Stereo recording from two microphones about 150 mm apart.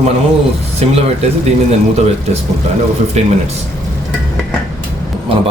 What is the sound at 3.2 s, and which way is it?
Speech, 45° right (ahead or behind).